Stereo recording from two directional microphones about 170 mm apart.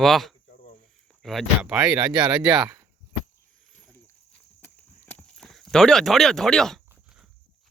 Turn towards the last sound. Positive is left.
turn(degrees=0)  # may be behind; listen again after turning